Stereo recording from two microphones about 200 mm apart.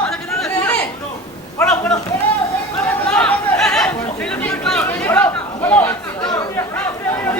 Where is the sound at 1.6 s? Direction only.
5° left (ahead or behind).